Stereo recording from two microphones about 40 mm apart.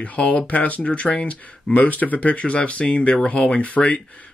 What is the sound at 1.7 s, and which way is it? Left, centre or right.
Speech, left.